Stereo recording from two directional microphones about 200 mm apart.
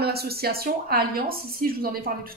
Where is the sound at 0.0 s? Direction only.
50° right (ahead or behind).